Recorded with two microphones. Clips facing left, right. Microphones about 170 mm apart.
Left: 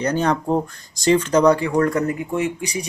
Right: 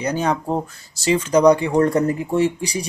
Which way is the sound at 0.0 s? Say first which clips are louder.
Left 1 dB; 10° right (ahead or behind).